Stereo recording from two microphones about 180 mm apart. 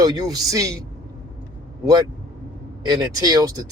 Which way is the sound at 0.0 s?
20° right (ahead or behind).